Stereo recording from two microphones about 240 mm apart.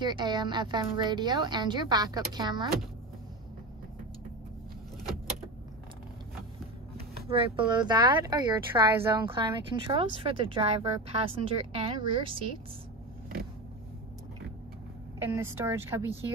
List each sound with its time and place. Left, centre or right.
0.0 s speech: centre
7.2 s speech: right
15.1 s speech: centre